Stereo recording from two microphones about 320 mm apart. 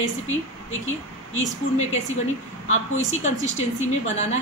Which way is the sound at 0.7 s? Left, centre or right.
Left.